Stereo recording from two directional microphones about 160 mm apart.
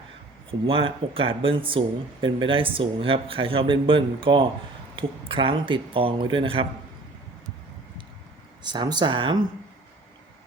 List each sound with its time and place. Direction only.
0.7 s speech: 35° right (ahead or behind)
8.6 s speech: 25° right (ahead or behind)